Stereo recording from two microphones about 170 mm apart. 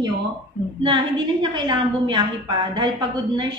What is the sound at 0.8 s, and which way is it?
A woman's voice, 25° right (ahead or behind).